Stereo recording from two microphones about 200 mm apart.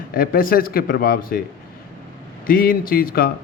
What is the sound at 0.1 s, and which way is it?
Speech, 45° left (ahead or behind).